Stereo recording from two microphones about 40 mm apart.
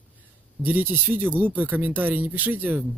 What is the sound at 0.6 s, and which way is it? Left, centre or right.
Speech, right.